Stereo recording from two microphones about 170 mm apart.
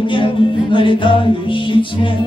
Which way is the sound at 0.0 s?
30° left (ahead or behind).